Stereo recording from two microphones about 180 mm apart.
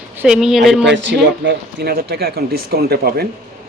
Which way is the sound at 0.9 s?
75° right (ahead or behind).